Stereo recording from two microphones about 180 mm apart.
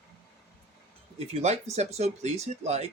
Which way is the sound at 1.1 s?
35° right (ahead or behind).